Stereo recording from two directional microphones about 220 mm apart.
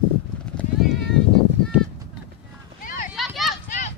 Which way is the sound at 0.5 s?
Centre (ahead or behind).